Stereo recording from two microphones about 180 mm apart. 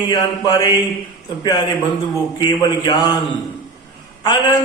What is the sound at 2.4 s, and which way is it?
A man's voice, 25° left (ahead or behind).